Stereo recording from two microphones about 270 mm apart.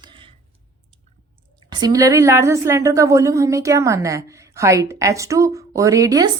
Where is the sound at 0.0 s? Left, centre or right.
Centre.